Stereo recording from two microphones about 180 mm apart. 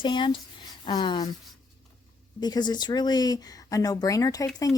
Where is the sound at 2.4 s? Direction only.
25° left (ahead or behind).